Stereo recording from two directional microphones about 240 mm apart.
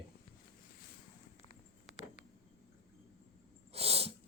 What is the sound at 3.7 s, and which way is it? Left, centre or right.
Sneeze, right.